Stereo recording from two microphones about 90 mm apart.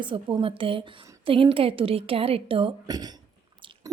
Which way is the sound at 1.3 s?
85° right.